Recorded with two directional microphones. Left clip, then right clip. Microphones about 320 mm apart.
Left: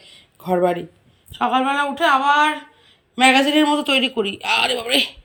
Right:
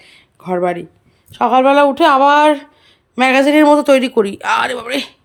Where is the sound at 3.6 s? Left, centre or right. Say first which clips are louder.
Right 8 dB; right.